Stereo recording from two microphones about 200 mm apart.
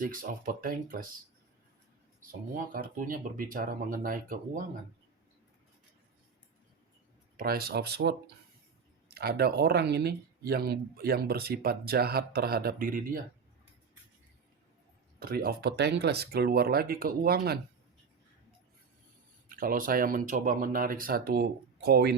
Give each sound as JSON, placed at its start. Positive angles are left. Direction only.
{"t": 0.0, "sound": "speech", "side_deg": -45}
{"t": 2.6, "sound": "speech", "side_deg": -40}
{"t": 7.3, "sound": "speech", "side_deg": -50}
{"t": 15.2, "sound": "speech", "side_deg": -50}
{"t": 19.5, "sound": "speech", "side_deg": -45}